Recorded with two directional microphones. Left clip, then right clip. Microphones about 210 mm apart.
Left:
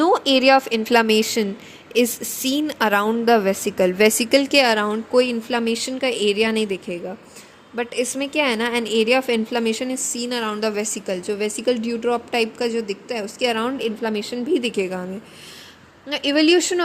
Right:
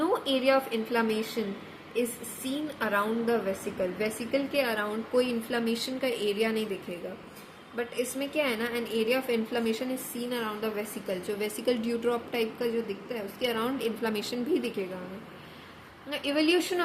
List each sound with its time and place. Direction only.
0.0 s a woman's voice: 45° left (ahead or behind)
7.8 s a woman's voice: 40° left (ahead or behind)
16.0 s a woman's voice: 35° left (ahead or behind)